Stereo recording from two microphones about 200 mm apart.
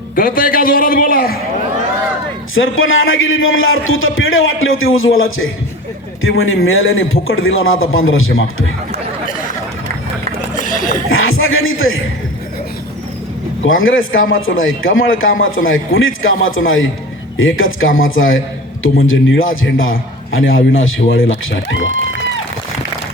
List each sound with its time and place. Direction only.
0.2 s a man's voice: 45° left (ahead or behind)
2.6 s a man's voice: 80° left
10.6 s a sound: 40° left (ahead or behind)
11.1 s speech: 90° left
13.7 s a man's voice: 85° left